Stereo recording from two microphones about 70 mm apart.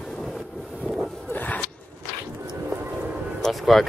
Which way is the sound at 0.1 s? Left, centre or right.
Centre.